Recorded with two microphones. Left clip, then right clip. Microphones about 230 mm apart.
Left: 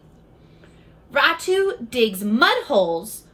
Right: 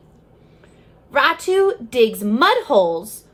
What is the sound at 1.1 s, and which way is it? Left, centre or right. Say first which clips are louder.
A woman's voice: right 2 dB; right.